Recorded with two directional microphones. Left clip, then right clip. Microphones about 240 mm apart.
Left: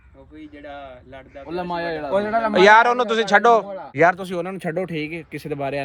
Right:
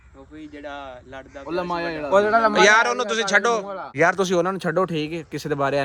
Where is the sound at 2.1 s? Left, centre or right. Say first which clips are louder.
Right 5 dB; centre.